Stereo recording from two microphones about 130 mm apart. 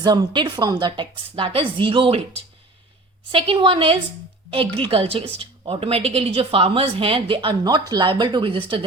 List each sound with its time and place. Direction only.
0.0 s a woman's voice: 35° right (ahead or behind)
3.3 s speech: 40° right (ahead or behind)